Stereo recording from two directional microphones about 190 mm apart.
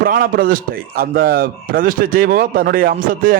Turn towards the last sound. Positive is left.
turn(degrees=-45)  # may be behind; listen again after turning